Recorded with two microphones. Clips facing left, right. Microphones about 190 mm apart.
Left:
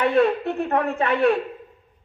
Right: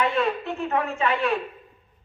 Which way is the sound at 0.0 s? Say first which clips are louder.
Left 5 dB; 60° left (ahead or behind).